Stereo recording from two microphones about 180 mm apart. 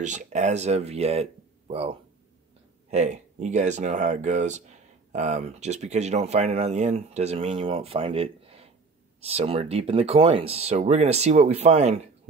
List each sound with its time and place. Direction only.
0.0 s speech: 40° right (ahead or behind)